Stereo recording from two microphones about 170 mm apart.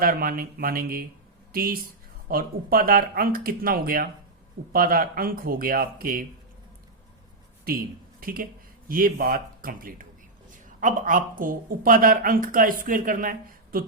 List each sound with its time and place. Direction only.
0.0 s a woman's voice: 60° right (ahead or behind)
7.6 s a woman's voice: 60° right (ahead or behind)